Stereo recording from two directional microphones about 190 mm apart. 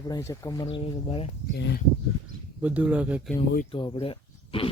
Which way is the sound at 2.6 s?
5° right (ahead or behind).